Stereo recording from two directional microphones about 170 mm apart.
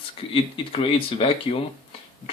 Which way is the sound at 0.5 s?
30° left (ahead or behind).